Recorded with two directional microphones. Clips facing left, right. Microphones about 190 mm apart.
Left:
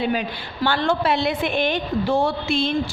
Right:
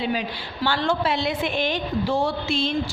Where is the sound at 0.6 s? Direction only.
55° left (ahead or behind).